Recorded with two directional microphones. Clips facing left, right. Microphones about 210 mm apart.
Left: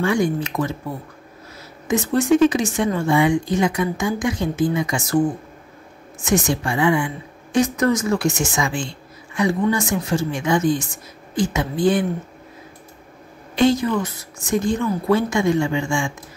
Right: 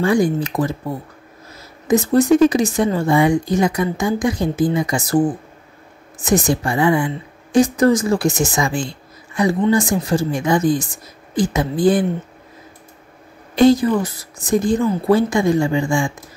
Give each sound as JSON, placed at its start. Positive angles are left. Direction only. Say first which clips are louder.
{"t": 0.0, "sound": "speech", "louder": "right 3 dB", "side_deg": -35}
{"t": 1.9, "sound": "speech", "louder": "right 4 dB", "side_deg": -35}
{"t": 6.2, "sound": "speech", "louder": "right 3 dB", "side_deg": -35}
{"t": 13.6, "sound": "speech", "louder": "right 5 dB", "side_deg": -35}